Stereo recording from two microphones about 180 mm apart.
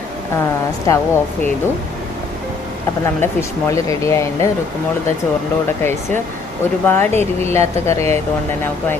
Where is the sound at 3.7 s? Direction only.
15° left (ahead or behind).